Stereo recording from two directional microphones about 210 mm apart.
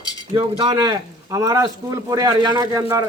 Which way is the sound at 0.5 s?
20° right (ahead or behind).